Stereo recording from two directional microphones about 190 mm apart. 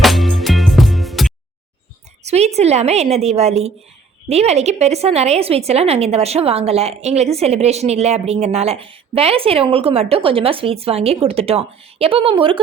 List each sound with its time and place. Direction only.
0.0 s music: centre (ahead or behind)
2.2 s a woman's voice: 35° right (ahead or behind)